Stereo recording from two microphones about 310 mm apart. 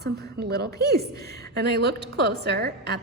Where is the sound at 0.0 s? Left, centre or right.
Right.